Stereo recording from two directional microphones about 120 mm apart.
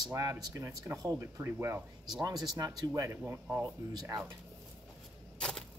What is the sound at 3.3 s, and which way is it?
Speech, 15° right (ahead or behind).